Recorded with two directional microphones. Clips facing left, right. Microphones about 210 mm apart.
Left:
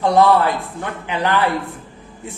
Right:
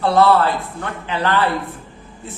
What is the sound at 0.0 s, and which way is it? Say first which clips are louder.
A man's voice: even; 15° left (ahead or behind).